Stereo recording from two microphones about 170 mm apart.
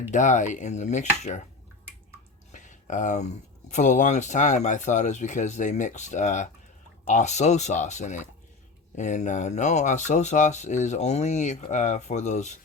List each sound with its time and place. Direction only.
0.1 s speech: 45° left (ahead or behind)
2.5 s a sound: 45° left (ahead or behind)
3.7 s speech: 45° left (ahead or behind)